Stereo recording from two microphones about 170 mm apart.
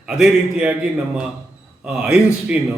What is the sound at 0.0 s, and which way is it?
A man's voice, 5° right (ahead or behind).